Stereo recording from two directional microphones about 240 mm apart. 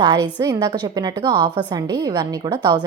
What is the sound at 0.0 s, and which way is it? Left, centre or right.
A woman's voice, centre.